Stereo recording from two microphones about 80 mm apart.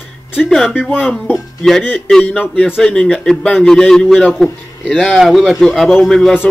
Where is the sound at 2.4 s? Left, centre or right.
Left.